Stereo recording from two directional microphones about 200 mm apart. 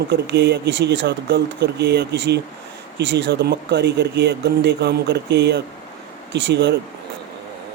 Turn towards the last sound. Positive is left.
turn(degrees=-60)  # may be behind; listen again after turning